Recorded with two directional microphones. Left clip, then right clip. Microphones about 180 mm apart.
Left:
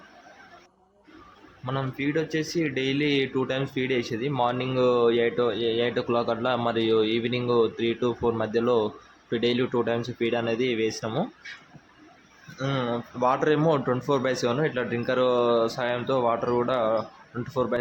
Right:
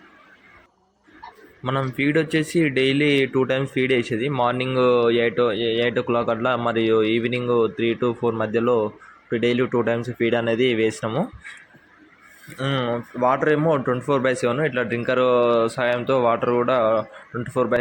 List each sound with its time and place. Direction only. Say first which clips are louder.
1.6 s speech: right 7 dB; 20° right (ahead or behind)
12.6 s speech: right 4 dB; 5° right (ahead or behind)
13.6 s speech: right 3 dB; centre (ahead or behind)
13.8 s speech: right 4 dB; 15° right (ahead or behind)